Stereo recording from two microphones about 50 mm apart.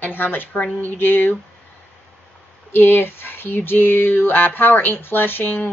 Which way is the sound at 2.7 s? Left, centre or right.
Left.